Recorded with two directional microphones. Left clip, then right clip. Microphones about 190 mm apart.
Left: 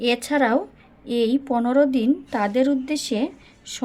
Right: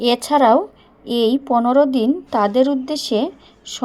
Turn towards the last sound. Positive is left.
turn(degrees=-10)  # may be behind; listen again after turning